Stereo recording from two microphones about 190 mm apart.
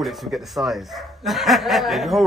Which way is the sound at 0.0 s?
Centre (ahead or behind).